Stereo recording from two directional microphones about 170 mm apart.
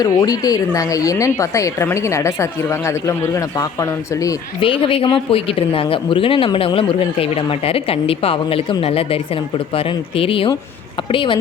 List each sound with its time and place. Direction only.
0.0 s speech: 20° left (ahead or behind)
4.6 s speech: 30° left (ahead or behind)